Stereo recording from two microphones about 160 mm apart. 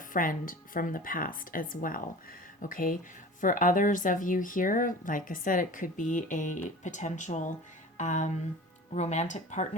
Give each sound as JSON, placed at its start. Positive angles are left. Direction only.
{"t": 0.1, "sound": "speech", "side_deg": 60}